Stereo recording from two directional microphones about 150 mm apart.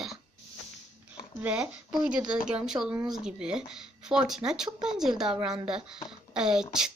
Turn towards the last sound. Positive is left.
turn(degrees=-5)  # may be behind; listen again after turning